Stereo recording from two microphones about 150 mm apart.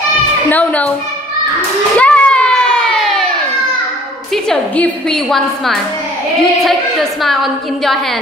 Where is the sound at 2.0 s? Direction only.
5° left (ahead or behind).